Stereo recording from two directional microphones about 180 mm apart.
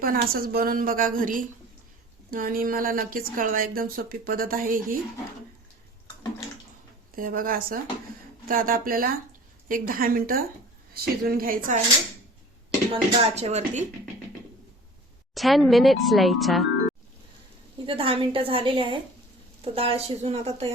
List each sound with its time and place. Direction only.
0.0 s speech: 55° right (ahead or behind)
7.2 s speech: 50° right (ahead or behind)
12.9 s speech: 35° right (ahead or behind)
15.4 s speech: centre (ahead or behind)
17.8 s a woman's voice: 30° right (ahead or behind)